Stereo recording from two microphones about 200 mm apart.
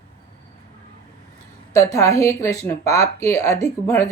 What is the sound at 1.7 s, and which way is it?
A man's voice, 15° left (ahead or behind).